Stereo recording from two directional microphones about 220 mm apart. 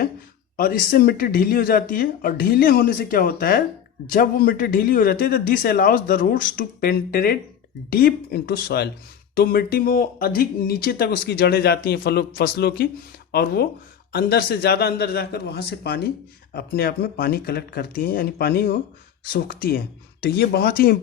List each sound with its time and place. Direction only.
0.5 s a man's voice: 40° left (ahead or behind)